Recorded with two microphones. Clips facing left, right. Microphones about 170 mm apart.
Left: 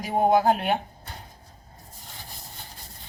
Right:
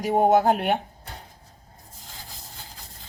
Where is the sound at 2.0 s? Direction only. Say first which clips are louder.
Even; 90° right.